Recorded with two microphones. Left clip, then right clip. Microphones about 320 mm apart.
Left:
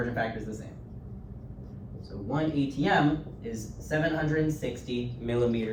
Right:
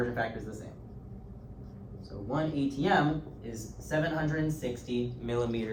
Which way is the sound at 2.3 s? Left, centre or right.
Centre.